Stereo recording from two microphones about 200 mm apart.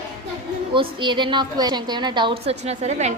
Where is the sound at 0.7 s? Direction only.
25° right (ahead or behind).